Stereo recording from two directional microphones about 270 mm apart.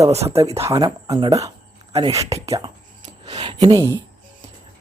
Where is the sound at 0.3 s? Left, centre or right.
Centre.